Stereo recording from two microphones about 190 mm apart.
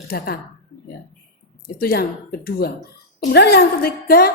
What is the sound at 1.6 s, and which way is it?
A woman's voice, 50° left (ahead or behind).